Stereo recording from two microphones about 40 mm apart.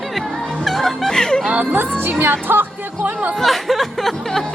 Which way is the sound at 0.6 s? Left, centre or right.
Centre.